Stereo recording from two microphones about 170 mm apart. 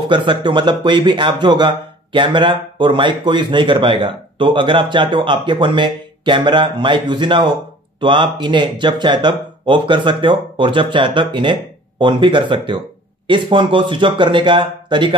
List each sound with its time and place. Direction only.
0.1 s speech: 25° right (ahead or behind)